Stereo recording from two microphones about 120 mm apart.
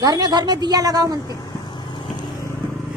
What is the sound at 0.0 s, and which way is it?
A woman's voice, 35° right (ahead or behind).